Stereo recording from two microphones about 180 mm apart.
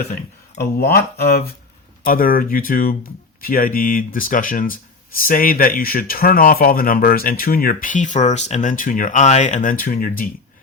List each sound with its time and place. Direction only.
0.6 s speech: 60° left (ahead or behind)